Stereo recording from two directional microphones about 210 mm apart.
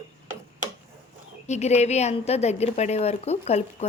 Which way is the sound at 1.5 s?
30° left (ahead or behind).